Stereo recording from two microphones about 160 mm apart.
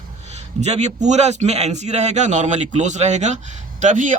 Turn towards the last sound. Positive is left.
turn(degrees=-50)  # may be behind; listen again after turning